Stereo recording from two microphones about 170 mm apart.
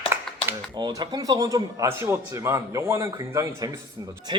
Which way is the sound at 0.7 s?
25° right (ahead or behind).